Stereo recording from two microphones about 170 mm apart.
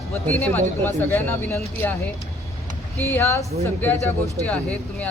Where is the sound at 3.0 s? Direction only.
10° left (ahead or behind).